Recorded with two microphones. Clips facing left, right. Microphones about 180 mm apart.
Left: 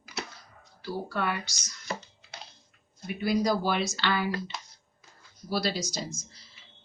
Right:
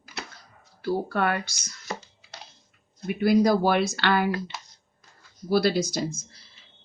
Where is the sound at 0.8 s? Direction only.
55° right (ahead or behind).